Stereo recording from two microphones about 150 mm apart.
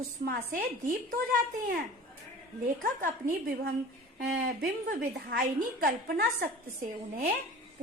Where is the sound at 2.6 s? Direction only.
60° right (ahead or behind).